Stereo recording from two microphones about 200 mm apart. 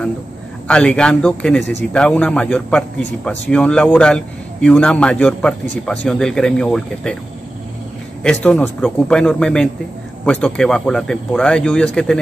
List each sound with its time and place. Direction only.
0.7 s a man's voice: 5° left (ahead or behind)
8.2 s a man's voice: 5° left (ahead or behind)